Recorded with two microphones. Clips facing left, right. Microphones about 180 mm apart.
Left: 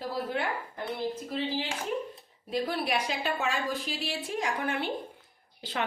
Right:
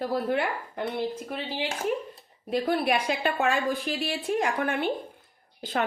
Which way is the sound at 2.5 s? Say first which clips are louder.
Right 5 dB; 55° right (ahead or behind).